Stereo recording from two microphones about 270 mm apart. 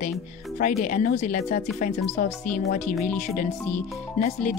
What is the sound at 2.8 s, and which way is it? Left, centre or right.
Speech, centre.